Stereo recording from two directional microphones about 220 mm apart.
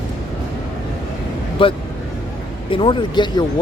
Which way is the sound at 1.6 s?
25° left (ahead or behind).